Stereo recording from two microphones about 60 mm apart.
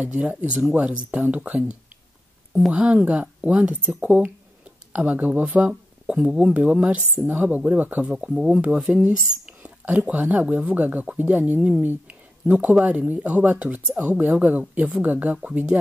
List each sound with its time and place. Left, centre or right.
0.0 s speech: right
5.7 s speech: centre
8.0 s speech: centre